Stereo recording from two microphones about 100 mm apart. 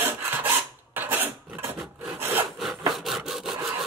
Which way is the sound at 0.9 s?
20° right (ahead or behind).